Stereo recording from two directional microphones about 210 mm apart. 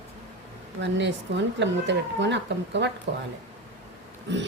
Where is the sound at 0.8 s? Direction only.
55° right (ahead or behind).